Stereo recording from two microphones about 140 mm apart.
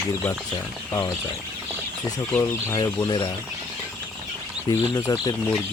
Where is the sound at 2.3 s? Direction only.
20° left (ahead or behind).